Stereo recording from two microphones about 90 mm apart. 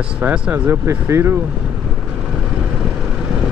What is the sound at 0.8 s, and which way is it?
Speech, 30° right (ahead or behind).